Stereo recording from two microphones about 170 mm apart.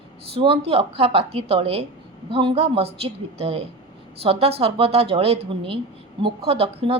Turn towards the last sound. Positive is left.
turn(degrees=-35)  # may be behind; listen again after turning